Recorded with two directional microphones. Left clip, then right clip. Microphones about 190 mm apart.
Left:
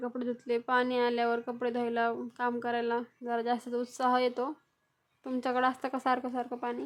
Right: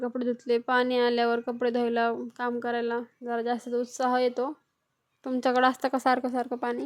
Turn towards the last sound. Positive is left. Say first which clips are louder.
# right 5 dB
turn(degrees=-25)  # may be behind; listen again after turning